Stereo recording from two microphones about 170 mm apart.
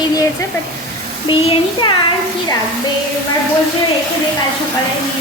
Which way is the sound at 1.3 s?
25° left (ahead or behind).